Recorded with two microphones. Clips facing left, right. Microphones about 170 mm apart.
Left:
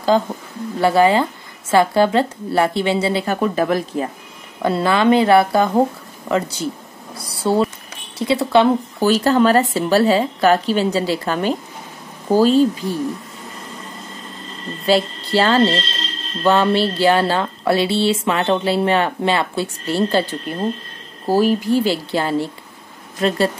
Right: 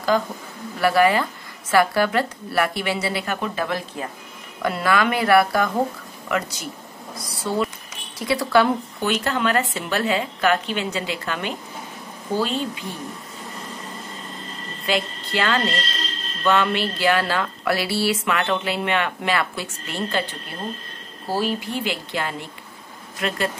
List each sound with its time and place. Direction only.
0.1 s speech: 25° left (ahead or behind)
3.5 s a woman's voice: 40° left (ahead or behind)
4.6 s speech: 30° left (ahead or behind)
9.0 s a woman's voice: 35° left (ahead or behind)
14.9 s a woman's voice: 30° left (ahead or behind)
20.5 s a woman's voice: 45° left (ahead or behind)